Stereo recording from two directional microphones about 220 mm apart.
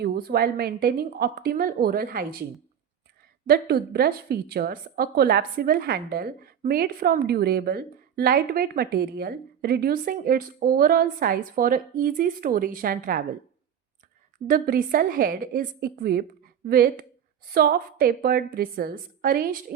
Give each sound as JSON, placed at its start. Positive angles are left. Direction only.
{"t": 0.0, "sound": "a woman's voice", "side_deg": -45}
{"t": 3.4, "sound": "a woman's voice", "side_deg": -45}
{"t": 14.4, "sound": "a woman's voice", "side_deg": -40}